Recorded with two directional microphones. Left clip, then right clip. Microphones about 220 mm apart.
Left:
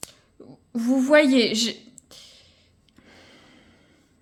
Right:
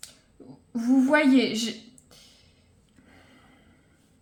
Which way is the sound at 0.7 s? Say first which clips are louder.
Left 4 dB; 40° left (ahead or behind).